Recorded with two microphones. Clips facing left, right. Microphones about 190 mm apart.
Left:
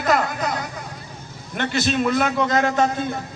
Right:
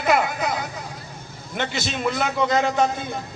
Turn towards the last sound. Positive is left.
turn(degrees=-15)  # may be behind; listen again after turning